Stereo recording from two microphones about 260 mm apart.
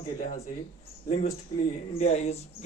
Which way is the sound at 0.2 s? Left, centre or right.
Left.